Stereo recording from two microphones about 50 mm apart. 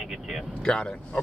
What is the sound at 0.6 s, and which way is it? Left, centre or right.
Speech, centre.